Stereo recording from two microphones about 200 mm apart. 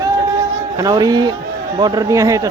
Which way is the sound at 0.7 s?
20° right (ahead or behind).